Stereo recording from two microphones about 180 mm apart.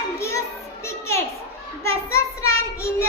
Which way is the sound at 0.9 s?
15° left (ahead or behind).